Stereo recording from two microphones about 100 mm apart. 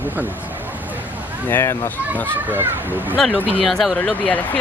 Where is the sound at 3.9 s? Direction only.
15° left (ahead or behind).